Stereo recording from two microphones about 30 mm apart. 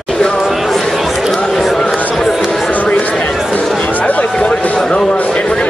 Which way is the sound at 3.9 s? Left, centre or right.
Left.